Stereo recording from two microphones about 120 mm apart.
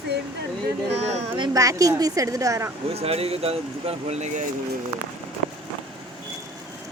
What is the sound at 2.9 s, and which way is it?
Speech, 60° right (ahead or behind).